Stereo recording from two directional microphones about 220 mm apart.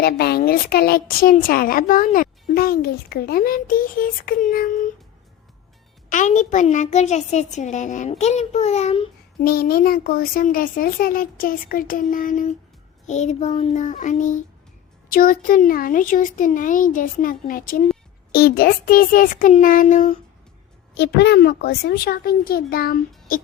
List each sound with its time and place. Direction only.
0.0 s a woman's voice: 45° left (ahead or behind)
6.1 s a woman's voice: 35° left (ahead or behind)
9.4 s a woman's voice: 40° left (ahead or behind)
20.9 s speech: 50° left (ahead or behind)